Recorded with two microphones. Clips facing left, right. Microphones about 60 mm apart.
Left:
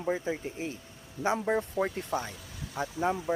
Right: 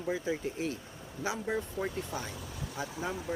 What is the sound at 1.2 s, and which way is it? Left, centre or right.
Speech, left.